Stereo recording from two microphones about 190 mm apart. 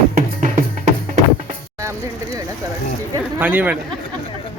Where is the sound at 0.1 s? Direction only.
45° right (ahead or behind).